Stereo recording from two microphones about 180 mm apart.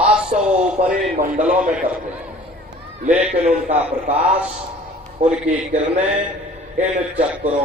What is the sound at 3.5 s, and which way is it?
Speech, 40° right (ahead or behind).